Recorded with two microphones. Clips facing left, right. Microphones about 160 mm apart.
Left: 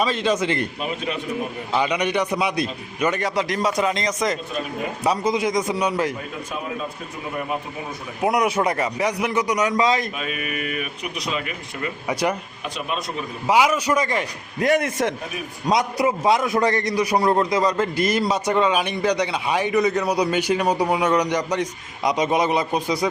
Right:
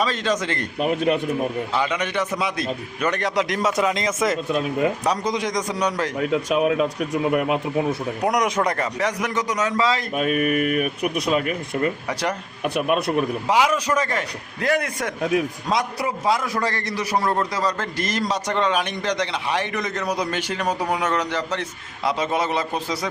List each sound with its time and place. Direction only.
0.0 s a man's voice: 10° left (ahead or behind)
0.8 s speech: 50° right (ahead or behind)
1.7 s a man's voice: 15° left (ahead or behind)
6.1 s speech: 85° right
8.2 s a man's voice: 5° left (ahead or behind)
10.2 s speech: 50° right (ahead or behind)
12.0 s a man's voice: 10° left (ahead or behind)
12.6 s a man's voice: 60° right (ahead or behind)
13.5 s a man's voice: 10° left (ahead or behind); by 15.1 s 25° left (ahead or behind)
15.2 s speech: 90° right
15.6 s a man's voice: 20° left (ahead or behind)